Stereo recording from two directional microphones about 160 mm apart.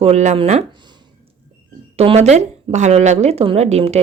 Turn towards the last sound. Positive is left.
turn(degrees=-40)  # may be behind; listen again after turning